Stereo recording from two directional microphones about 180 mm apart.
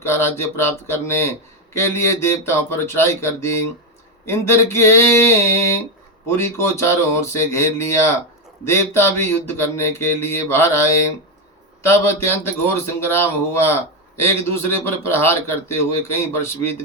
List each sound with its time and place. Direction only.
0.0 s speech: 15° left (ahead or behind)